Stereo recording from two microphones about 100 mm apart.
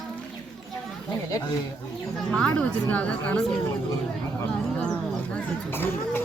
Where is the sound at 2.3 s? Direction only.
15° left (ahead or behind).